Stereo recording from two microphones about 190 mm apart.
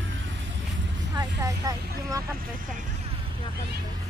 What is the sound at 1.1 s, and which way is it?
Speech, 20° right (ahead or behind).